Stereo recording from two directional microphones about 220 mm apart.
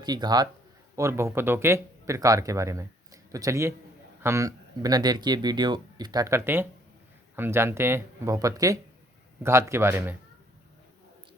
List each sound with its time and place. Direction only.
0.0 s speech: 20° right (ahead or behind)